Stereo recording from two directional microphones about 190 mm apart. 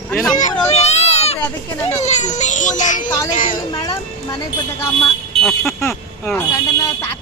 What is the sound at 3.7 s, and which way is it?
Speech, 20° left (ahead or behind).